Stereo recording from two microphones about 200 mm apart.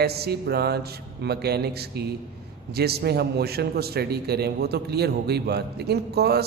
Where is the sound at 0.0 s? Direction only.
55° right (ahead or behind).